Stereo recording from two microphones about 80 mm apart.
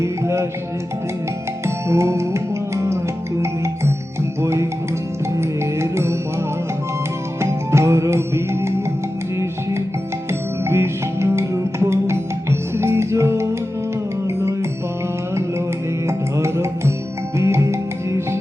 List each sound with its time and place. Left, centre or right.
0.0 s music: right
1.6 s music: right
4.4 s music: right
7.4 s music: right
10.7 s music: right
16.0 s music: right